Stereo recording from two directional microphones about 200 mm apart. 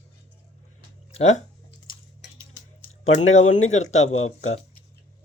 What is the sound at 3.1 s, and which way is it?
Speech, 35° left (ahead or behind).